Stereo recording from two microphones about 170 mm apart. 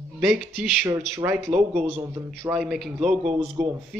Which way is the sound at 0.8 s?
15° right (ahead or behind).